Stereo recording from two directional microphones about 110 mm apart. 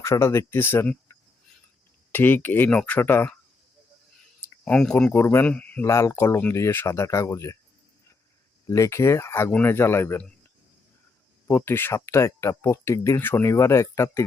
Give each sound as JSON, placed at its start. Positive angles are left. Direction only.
{"t": 0.0, "sound": "speech", "side_deg": 25}
{"t": 2.1, "sound": "speech", "side_deg": 20}
{"t": 4.6, "sound": "speech", "side_deg": 5}
{"t": 5.1, "sound": "speech", "side_deg": 25}
{"t": 5.8, "sound": "speech", "side_deg": 25}
{"t": 8.6, "sound": "speech", "side_deg": 30}
{"t": 11.4, "sound": "speech", "side_deg": 20}